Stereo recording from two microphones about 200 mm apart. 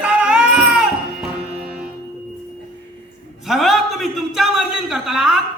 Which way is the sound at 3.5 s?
Centre (ahead or behind).